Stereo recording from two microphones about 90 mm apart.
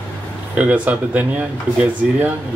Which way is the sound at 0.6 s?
15° right (ahead or behind).